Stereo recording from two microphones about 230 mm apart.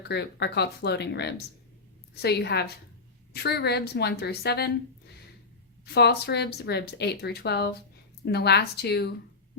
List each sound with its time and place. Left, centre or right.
0.1 s speech: left
5.8 s speech: left